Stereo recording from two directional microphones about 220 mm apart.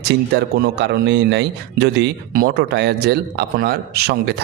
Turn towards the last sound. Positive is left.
turn(degrees=-45)  # may be behind; listen again after turning